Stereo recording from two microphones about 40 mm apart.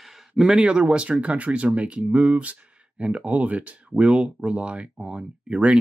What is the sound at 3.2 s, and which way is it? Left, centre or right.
Speech, right.